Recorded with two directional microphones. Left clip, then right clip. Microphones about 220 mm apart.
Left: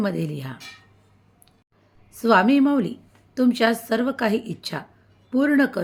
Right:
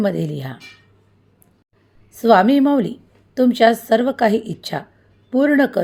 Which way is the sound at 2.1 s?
10° right (ahead or behind).